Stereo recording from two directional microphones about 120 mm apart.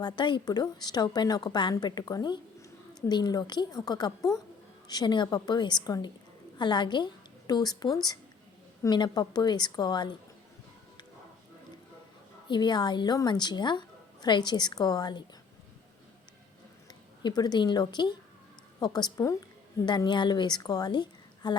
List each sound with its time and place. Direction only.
0.0 s a woman's voice: 40° left (ahead or behind)
12.5 s a woman's voice: 40° left (ahead or behind)
17.2 s a woman's voice: 35° left (ahead or behind)
20.1 s a woman's voice: 40° left (ahead or behind)